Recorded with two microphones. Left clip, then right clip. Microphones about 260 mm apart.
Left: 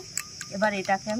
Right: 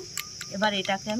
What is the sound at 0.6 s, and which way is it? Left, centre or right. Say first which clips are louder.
Speech: left 1 dB; centre.